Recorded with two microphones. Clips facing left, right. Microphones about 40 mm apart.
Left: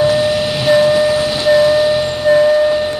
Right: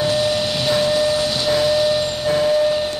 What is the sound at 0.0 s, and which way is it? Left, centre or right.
Train, centre.